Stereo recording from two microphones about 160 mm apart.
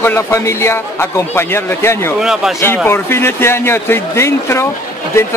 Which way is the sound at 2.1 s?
5° right (ahead or behind).